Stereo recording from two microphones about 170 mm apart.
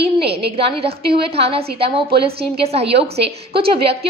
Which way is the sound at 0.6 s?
35° right (ahead or behind).